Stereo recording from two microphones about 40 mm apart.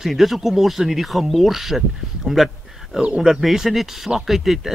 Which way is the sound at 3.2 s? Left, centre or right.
Centre.